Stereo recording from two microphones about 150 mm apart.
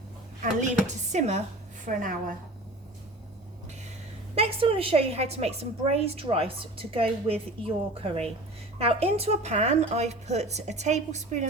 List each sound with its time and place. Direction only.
0.6 s a woman's voice: 50° right (ahead or behind)
1.8 s a woman's voice: 65° right (ahead or behind)
4.4 s a woman's voice: 40° right (ahead or behind)